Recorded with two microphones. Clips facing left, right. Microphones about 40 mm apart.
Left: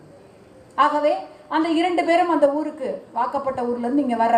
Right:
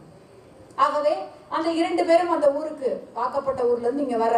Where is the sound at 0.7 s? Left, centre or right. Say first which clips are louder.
Left 3 dB; left.